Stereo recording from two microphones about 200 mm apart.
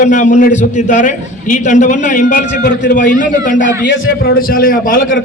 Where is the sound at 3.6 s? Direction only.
65° left (ahead or behind); by 5.1 s 45° left (ahead or behind).